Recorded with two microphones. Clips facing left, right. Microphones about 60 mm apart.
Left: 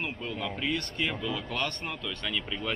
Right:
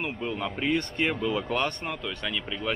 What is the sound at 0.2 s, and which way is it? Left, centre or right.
Speech, centre.